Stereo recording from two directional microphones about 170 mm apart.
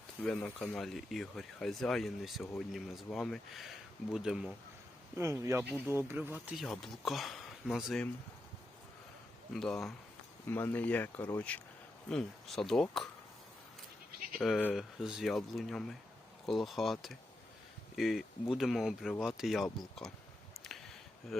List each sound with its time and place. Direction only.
0.2 s speech: 5° left (ahead or behind)
5.1 s speech: 15° right (ahead or behind)
9.5 s speech: centre (ahead or behind)
10.4 s speech: 10° left (ahead or behind)
14.3 s speech: centre (ahead or behind)